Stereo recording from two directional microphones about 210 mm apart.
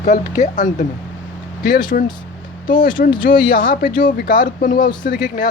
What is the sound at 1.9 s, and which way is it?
Speech, 40° left (ahead or behind).